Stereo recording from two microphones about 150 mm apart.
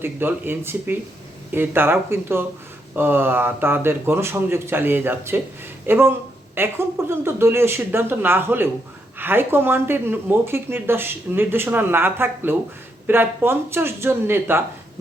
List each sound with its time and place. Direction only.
0.0 s speech: 15° right (ahead or behind)